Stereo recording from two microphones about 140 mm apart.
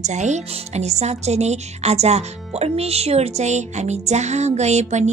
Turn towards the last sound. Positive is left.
turn(degrees=-55)  # may be behind; listen again after turning